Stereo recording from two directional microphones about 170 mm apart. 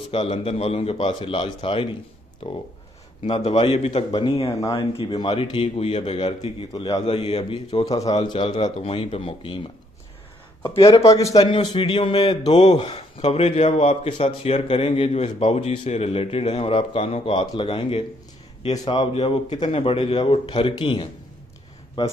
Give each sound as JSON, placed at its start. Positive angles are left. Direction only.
{"t": 0.1, "sound": "a man's voice", "side_deg": 30}
{"t": 4.6, "sound": "a man's voice", "side_deg": 20}
{"t": 10.7, "sound": "a man's voice", "side_deg": 20}
{"t": 19.2, "sound": "a man's voice", "side_deg": 25}